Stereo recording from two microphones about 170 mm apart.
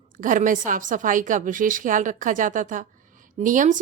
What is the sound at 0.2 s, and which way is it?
Speech, 50° right (ahead or behind).